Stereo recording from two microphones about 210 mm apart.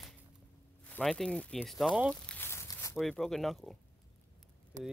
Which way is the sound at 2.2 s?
10° left (ahead or behind).